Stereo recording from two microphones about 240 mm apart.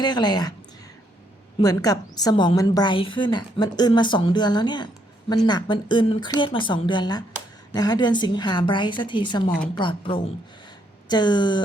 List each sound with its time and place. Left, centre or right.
0.0 s a woman's voice: centre
1.6 s a woman's voice: centre